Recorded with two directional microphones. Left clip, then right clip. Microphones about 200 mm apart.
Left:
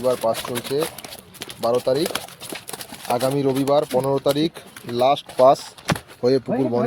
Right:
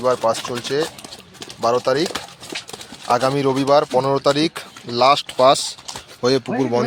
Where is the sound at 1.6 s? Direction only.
30° right (ahead or behind).